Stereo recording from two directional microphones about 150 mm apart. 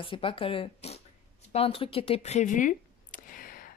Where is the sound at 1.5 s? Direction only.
40° left (ahead or behind); by 3.7 s 70° left (ahead or behind).